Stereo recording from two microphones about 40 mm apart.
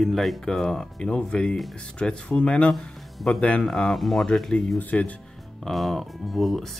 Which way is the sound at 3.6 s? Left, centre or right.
Centre.